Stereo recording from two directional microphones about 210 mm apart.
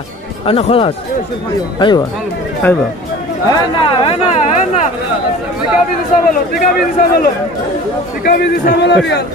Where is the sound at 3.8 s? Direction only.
25° left (ahead or behind).